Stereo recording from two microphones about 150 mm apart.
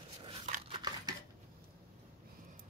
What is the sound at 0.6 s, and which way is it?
Scissors, 30° right (ahead or behind).